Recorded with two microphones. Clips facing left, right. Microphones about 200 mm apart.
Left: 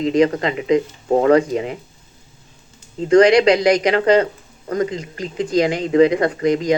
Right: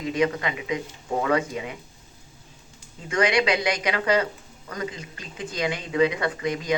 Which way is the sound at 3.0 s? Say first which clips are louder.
Left 11 dB; 30° left (ahead or behind).